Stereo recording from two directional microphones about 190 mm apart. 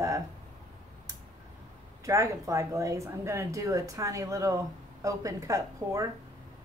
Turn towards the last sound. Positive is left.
turn(degrees=-15)  # may be behind; listen again after turning